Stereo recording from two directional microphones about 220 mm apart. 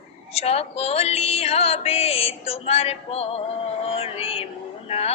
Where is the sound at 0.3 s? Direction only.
25° left (ahead or behind).